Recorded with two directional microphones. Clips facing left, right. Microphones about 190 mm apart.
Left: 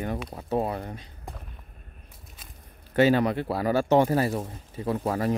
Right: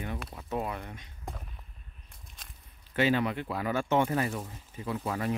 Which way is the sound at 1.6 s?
50° left (ahead or behind).